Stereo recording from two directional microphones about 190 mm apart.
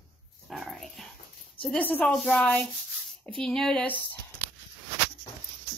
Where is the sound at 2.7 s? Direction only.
Centre (ahead or behind).